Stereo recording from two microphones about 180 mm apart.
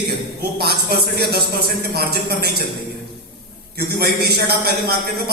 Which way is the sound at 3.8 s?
60° right (ahead or behind).